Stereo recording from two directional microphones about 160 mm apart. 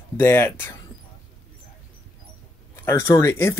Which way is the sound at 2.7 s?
15° left (ahead or behind).